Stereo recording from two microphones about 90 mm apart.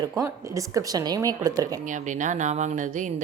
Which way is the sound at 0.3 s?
35° right (ahead or behind).